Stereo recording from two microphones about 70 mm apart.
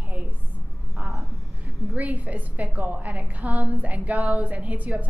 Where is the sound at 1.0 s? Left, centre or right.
Centre.